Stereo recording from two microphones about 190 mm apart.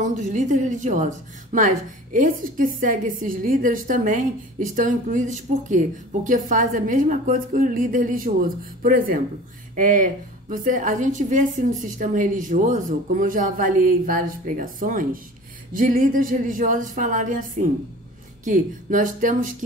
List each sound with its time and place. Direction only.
0.0 s a woman's voice: 40° right (ahead or behind)